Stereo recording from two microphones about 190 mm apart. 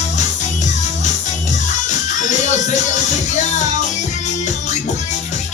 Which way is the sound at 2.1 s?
40° left (ahead or behind).